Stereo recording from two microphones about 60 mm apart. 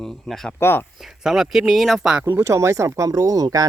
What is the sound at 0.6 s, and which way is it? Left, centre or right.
Speech, left.